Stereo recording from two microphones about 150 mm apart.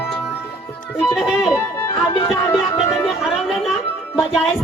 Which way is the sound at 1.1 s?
5° right (ahead or behind).